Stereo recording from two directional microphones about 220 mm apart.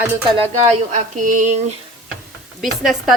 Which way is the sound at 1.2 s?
35° right (ahead or behind).